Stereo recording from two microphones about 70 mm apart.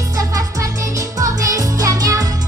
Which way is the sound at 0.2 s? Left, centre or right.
Right.